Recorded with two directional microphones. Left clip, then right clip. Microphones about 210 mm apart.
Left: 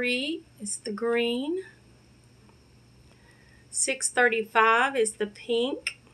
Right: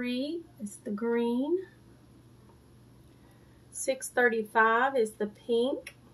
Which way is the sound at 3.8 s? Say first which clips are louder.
Left 3 dB; centre (ahead or behind).